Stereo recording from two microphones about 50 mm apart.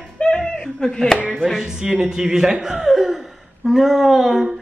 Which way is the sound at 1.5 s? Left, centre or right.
Centre.